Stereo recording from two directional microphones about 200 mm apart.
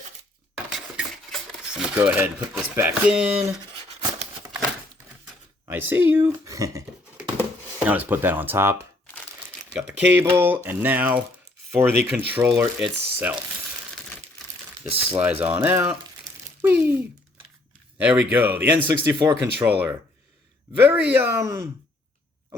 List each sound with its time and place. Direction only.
0.5 s a sound: centre (ahead or behind)
5.6 s speech: 10° right (ahead or behind)
7.9 s speech: 10° right (ahead or behind)
10.2 s speech: 10° right (ahead or behind)
14.8 s speech: 30° right (ahead or behind)
15.2 s speech: 10° right (ahead or behind)
17.9 s speech: 10° right (ahead or behind)
20.7 s speech: 10° right (ahead or behind)